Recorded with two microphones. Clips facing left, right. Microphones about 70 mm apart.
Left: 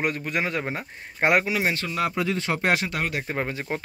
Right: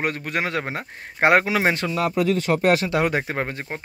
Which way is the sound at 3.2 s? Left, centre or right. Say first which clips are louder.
Right 2 dB; right.